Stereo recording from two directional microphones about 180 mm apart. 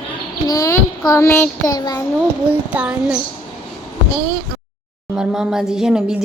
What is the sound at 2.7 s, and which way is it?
Speech, 5° right (ahead or behind).